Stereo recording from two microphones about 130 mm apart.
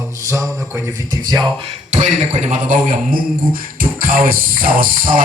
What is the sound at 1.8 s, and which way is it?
Speech, 70° right (ahead or behind).